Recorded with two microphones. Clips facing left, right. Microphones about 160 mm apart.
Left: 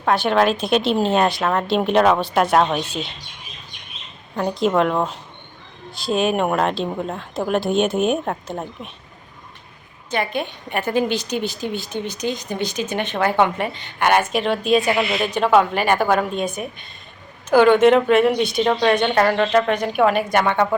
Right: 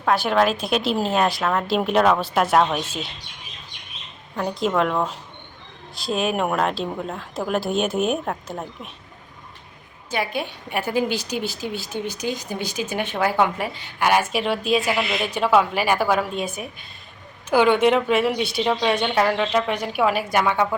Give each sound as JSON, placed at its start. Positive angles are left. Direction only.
{"t": 0.0, "sound": "speech", "side_deg": 0}
{"t": 4.4, "sound": "speech", "side_deg": 5}
{"t": 7.2, "sound": "speech", "side_deg": 0}
{"t": 10.1, "sound": "a woman's voice", "side_deg": -5}
{"t": 17.5, "sound": "a woman's voice", "side_deg": 50}
{"t": 17.9, "sound": "speech", "side_deg": -5}